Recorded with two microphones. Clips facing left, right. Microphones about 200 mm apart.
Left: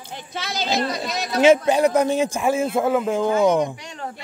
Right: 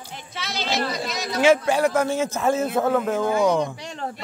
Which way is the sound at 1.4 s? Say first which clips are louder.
Left 3 dB; 20° left (ahead or behind).